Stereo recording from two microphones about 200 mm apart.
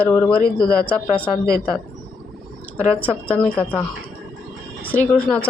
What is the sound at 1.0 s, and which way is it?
Speech, 25° left (ahead or behind).